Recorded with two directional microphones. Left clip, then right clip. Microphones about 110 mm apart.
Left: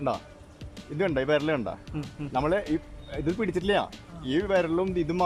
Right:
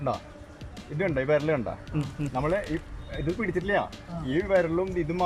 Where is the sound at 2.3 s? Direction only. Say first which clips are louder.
Left 2 dB; 20° left (ahead or behind).